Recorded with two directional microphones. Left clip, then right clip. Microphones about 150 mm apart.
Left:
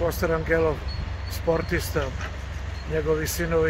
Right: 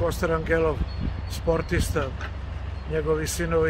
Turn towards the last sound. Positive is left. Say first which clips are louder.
# even
turn(degrees=0)  # may be behind; listen again after turning